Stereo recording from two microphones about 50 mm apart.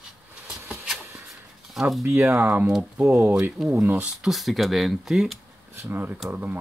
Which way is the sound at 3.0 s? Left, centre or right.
Right.